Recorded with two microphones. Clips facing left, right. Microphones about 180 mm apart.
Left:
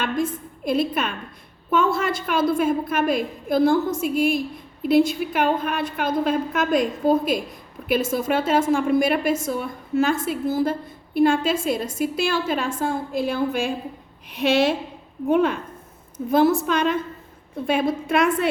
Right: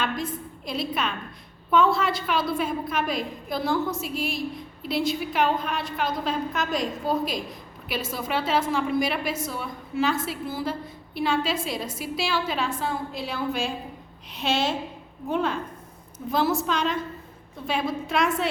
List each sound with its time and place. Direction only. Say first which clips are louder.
0.0 s a woman's voice: left 5 dB; 50° left (ahead or behind)